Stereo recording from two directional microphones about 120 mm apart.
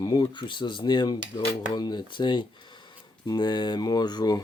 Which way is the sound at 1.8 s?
35° left (ahead or behind).